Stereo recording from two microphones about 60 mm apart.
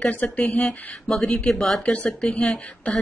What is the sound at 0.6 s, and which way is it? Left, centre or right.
Speech, centre.